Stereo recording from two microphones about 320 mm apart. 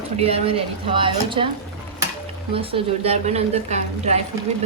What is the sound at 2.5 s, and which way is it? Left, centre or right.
A woman's voice, centre.